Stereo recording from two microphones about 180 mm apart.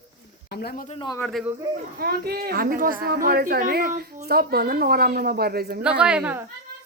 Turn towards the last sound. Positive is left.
turn(degrees=-10)  # may be behind; listen again after turning